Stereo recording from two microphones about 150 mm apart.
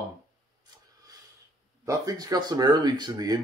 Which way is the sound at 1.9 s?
25° right (ahead or behind).